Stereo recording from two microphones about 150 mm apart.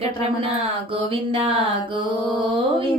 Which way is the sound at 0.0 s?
40° right (ahead or behind).